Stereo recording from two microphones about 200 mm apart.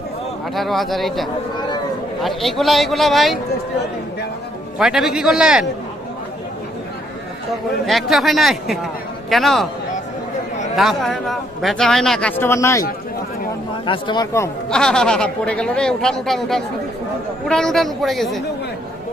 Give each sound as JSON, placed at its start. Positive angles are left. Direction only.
{"t": 0.6, "sound": "a man's voice", "side_deg": 0}
{"t": 4.7, "sound": "a man's voice", "side_deg": 0}
{"t": 7.8, "sound": "a man's voice", "side_deg": 0}
{"t": 10.8, "sound": "a man's voice", "side_deg": 0}
{"t": 13.8, "sound": "speech", "side_deg": 20}
{"t": 14.7, "sound": "a man's voice", "side_deg": 5}